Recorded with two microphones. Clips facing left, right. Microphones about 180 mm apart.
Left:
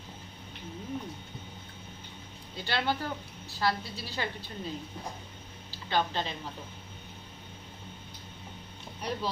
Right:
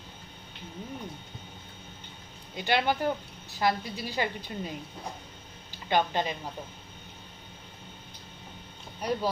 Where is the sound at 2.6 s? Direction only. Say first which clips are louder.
Right 5 dB; 15° right (ahead or behind).